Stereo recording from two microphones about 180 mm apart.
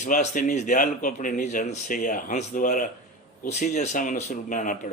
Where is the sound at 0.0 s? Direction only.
45° left (ahead or behind).